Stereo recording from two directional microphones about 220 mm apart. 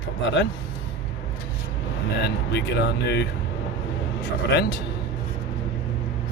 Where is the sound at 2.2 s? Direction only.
50° left (ahead or behind).